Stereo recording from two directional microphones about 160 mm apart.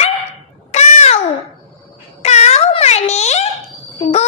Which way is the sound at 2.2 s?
45° left (ahead or behind).